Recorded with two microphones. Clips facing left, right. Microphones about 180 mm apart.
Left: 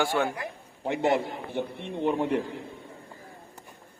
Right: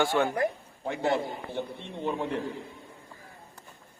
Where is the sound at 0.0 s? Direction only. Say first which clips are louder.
Right 1 dB; 5° left (ahead or behind).